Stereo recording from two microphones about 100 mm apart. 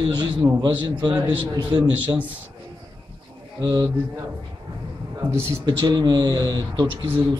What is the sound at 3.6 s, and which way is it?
Speech, 40° right (ahead or behind).